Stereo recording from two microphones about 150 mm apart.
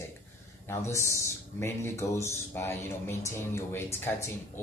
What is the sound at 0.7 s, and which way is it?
Speech, 20° left (ahead or behind).